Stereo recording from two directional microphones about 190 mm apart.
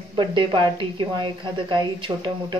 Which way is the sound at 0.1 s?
25° right (ahead or behind).